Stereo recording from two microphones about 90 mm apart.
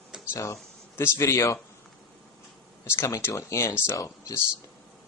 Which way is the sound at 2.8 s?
30° left (ahead or behind).